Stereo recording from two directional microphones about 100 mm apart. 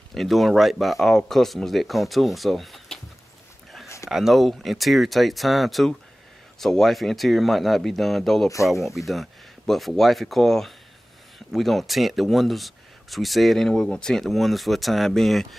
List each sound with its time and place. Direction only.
0.1 s speech: centre (ahead or behind)
4.1 s speech: 5° right (ahead or behind)